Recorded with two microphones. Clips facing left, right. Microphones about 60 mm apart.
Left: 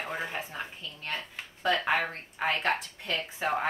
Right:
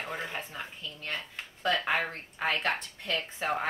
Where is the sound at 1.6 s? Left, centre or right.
Centre.